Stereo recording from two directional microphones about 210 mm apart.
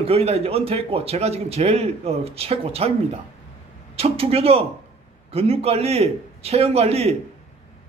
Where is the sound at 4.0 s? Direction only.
30° right (ahead or behind).